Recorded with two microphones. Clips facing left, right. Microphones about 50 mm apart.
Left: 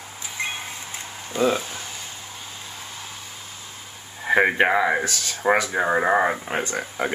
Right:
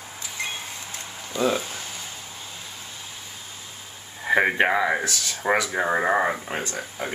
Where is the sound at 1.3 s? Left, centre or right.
Left.